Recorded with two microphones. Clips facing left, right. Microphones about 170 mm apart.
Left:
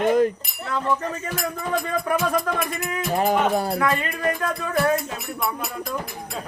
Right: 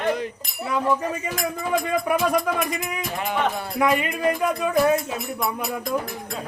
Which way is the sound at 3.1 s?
40° left (ahead or behind).